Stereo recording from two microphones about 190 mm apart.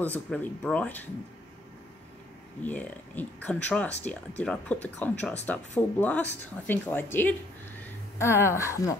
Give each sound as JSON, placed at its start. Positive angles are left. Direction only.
{"t": 0.0, "sound": "speech", "side_deg": 10}
{"t": 2.6, "sound": "speech", "side_deg": 10}